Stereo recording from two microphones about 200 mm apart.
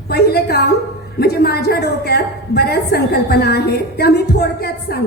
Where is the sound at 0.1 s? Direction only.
55° left (ahead or behind).